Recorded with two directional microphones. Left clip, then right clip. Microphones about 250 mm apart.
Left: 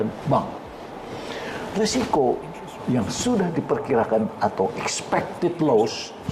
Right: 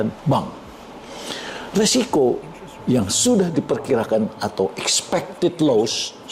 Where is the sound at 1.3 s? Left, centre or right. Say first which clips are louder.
Right 2 dB; right.